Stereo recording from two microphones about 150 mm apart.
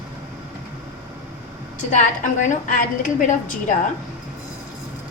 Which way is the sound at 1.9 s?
55° left (ahead or behind).